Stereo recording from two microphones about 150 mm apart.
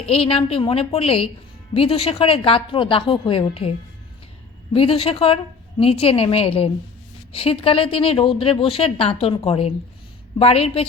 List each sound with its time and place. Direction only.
0.0 s a woman's voice: 40° left (ahead or behind)